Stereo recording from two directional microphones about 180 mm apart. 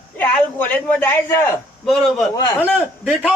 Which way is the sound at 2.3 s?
20° left (ahead or behind).